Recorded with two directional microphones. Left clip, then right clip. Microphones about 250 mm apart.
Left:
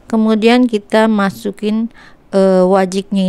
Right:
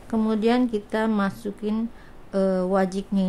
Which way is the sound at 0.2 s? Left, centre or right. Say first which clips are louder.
Left 11 dB; left.